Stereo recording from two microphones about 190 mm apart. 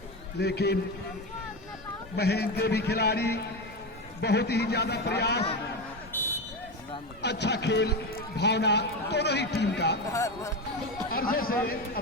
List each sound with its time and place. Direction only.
0.3 s a man's voice: 60° left (ahead or behind)
2.1 s a man's voice: 60° left (ahead or behind)
6.1 s a sound: 10° left (ahead or behind)
7.2 s a man's voice: 65° left (ahead or behind)
10.1 s speech: 15° left (ahead or behind)
11.1 s a man's voice: 50° left (ahead or behind)